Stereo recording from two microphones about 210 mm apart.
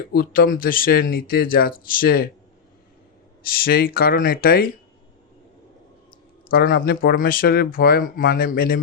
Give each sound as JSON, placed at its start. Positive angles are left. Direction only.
{"t": 0.1, "sound": "speech", "side_deg": 45}
{"t": 3.4, "sound": "speech", "side_deg": 45}
{"t": 6.5, "sound": "speech", "side_deg": 50}